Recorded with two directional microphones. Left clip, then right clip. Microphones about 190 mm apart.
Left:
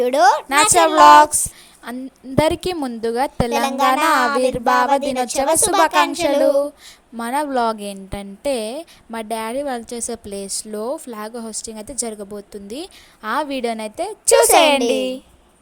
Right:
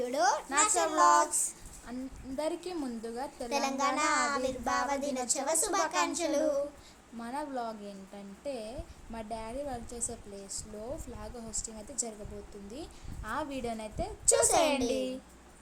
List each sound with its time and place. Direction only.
0.0 s a woman's voice: 45° left (ahead or behind)
3.5 s a woman's voice: 35° left (ahead or behind)
7.2 s a woman's voice: 50° left (ahead or behind)